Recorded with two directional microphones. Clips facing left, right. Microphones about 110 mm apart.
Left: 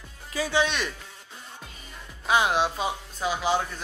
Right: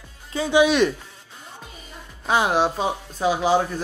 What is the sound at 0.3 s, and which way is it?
Speech, 25° right (ahead or behind).